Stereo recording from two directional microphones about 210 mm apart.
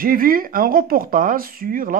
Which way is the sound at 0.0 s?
40° right (ahead or behind).